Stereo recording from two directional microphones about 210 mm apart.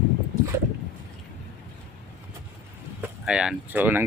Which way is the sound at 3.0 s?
5° right (ahead or behind).